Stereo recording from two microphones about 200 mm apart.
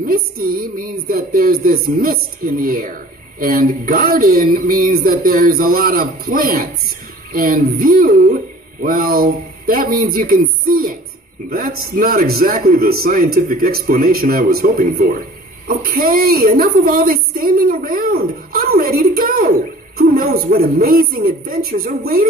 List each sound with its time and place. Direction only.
0.0 s a woman's voice: 45° right (ahead or behind)